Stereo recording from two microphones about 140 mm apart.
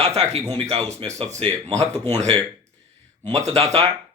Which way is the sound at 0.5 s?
35° right (ahead or behind).